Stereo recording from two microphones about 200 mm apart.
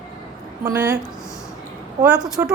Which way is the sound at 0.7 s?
15° right (ahead or behind).